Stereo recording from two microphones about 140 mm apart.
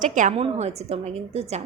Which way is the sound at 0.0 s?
65° right (ahead or behind).